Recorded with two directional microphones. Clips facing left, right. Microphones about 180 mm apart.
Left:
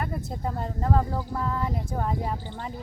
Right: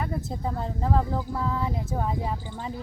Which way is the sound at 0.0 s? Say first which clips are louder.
Right 1 dB; centre (ahead or behind).